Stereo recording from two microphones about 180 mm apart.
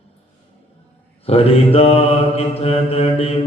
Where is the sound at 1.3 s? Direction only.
35° left (ahead or behind).